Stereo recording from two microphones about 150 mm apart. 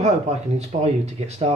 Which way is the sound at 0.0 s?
45° right (ahead or behind).